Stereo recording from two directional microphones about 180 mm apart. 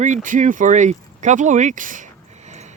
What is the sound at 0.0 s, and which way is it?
Speech, 45° right (ahead or behind).